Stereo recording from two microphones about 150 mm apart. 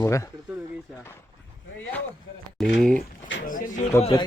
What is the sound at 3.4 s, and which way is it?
Speech, 65° left (ahead or behind).